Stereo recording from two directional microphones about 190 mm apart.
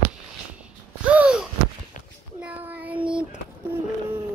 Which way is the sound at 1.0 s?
5° right (ahead or behind).